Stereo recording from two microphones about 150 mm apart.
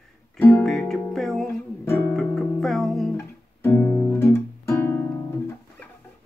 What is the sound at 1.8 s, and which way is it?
Music, 15° left (ahead or behind).